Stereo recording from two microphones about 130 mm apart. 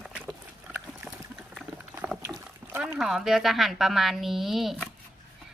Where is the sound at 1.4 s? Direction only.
5° right (ahead or behind).